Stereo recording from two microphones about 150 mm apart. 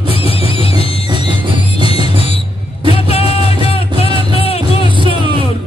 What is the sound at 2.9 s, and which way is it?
Music, 40° left (ahead or behind).